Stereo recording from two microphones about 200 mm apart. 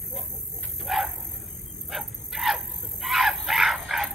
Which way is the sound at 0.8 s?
Centre (ahead or behind).